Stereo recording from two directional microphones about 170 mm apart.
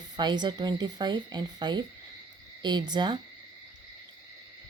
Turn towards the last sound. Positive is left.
turn(degrees=-25)  # may be behind; listen again after turning